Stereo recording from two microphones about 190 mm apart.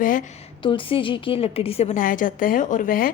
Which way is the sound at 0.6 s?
25° left (ahead or behind).